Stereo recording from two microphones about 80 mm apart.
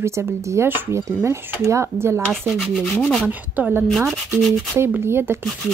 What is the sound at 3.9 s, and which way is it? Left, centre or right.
Rub, centre.